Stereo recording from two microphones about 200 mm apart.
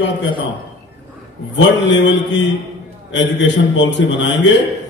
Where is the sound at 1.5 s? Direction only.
65° left (ahead or behind).